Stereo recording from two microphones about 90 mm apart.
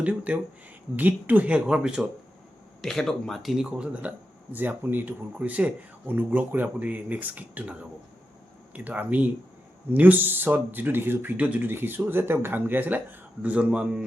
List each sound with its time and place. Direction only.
0.0 s speech: 15° right (ahead or behind)
2.8 s speech: 5° left (ahead or behind); by 14.0 s 10° right (ahead or behind)